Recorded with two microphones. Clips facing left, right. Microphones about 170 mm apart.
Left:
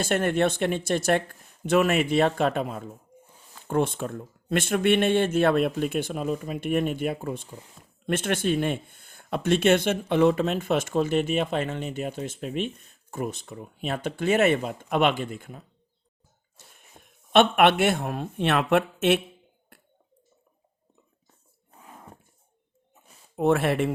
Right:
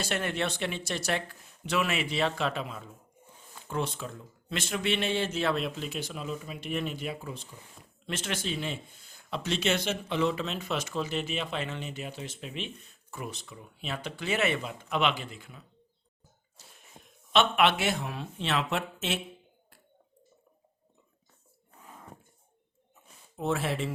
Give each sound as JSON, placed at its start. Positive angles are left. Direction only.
{"t": 0.0, "sound": "speech", "side_deg": 50}
{"t": 19.7, "sound": "a sound", "side_deg": 60}
{"t": 23.4, "sound": "speech", "side_deg": 60}